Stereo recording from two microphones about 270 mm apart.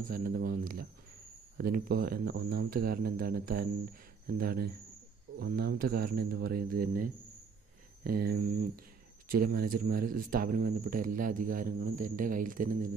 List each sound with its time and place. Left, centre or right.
0.0 s speech: right